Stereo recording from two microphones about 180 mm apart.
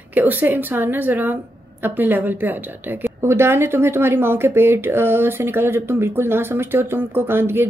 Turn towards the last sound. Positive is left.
turn(degrees=-10)  # may be behind; listen again after turning